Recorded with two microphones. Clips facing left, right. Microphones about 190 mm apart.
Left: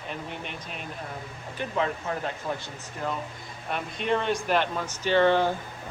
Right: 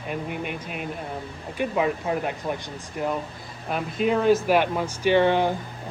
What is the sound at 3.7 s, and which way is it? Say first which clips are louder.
Speech: right 4 dB; 5° right (ahead or behind).